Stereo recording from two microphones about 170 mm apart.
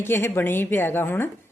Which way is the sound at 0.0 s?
15° left (ahead or behind).